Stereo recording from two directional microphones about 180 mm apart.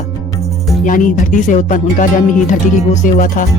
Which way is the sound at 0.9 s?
45° left (ahead or behind).